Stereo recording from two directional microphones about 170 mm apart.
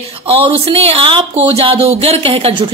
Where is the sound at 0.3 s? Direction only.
35° right (ahead or behind).